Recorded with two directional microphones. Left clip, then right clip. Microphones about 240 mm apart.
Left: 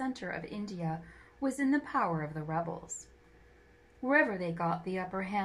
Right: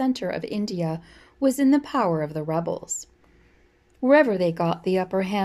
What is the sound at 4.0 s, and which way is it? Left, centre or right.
Speech, right.